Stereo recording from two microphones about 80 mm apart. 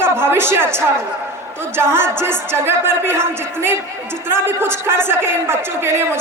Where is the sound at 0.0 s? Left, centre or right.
Right.